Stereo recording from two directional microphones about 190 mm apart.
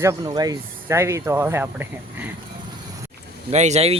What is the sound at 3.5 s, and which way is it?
Speech, 35° right (ahead or behind).